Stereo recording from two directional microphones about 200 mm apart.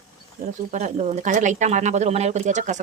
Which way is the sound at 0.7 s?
35° right (ahead or behind).